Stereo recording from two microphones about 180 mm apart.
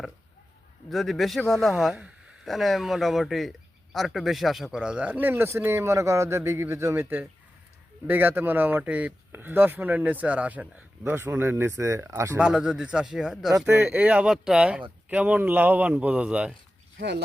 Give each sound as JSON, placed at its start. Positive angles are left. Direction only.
{"t": 0.9, "sound": "speech", "side_deg": 0}
{"t": 12.4, "sound": "speech", "side_deg": -5}